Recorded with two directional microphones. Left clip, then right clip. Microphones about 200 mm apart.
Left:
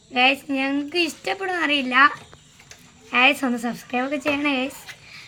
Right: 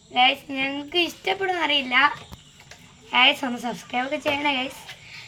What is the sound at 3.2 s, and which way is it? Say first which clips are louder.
A woman's voice: left 2 dB; 55° left (ahead or behind).